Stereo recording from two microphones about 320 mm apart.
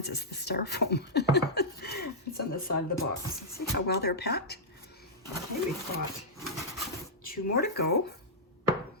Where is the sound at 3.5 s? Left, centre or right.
Left.